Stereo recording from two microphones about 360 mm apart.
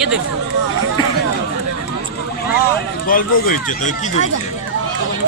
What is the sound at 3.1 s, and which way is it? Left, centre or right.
Speech, left.